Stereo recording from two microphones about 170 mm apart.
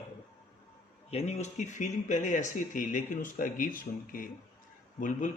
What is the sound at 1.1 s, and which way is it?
Speech, 40° left (ahead or behind).